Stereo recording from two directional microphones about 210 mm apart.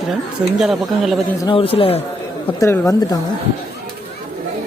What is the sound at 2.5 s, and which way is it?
Speech, 10° left (ahead or behind).